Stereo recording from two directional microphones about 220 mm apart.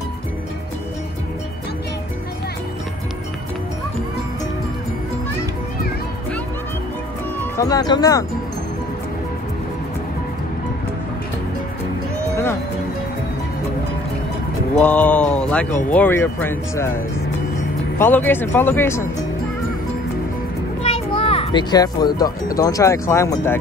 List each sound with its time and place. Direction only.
7.3 s speech: 15° left (ahead or behind)
14.8 s speech: 5° left (ahead or behind)
17.9 s speech: 10° left (ahead or behind)
20.8 s a child's voice: 25° left (ahead or behind)